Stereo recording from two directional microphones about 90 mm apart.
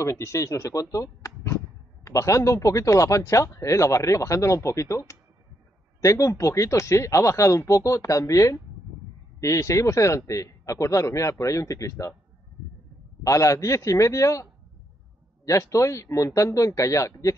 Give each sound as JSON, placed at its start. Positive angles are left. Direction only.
{"t": 0.0, "sound": "speech", "side_deg": 30}
{"t": 0.9, "sound": "a sound", "side_deg": 30}
{"t": 2.0, "sound": "speech", "side_deg": 35}
{"t": 13.2, "sound": "speech", "side_deg": 35}